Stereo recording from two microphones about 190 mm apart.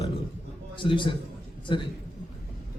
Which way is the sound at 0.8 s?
25° left (ahead or behind).